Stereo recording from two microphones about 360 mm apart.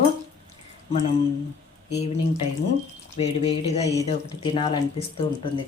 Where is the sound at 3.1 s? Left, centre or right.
Centre.